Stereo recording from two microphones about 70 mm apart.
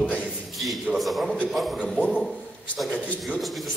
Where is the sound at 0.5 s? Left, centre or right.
Centre.